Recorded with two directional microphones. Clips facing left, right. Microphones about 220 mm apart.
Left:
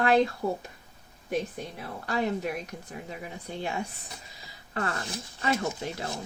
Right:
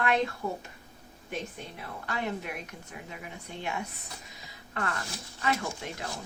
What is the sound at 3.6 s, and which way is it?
Speech, 30° left (ahead or behind).